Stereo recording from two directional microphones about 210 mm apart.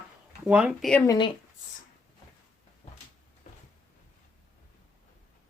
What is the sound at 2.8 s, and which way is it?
Cupboard open or close, 30° left (ahead or behind).